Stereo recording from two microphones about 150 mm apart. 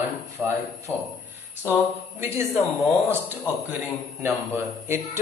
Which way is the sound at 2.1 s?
15° right (ahead or behind).